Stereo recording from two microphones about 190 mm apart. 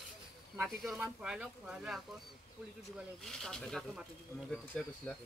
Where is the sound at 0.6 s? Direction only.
Centre (ahead or behind).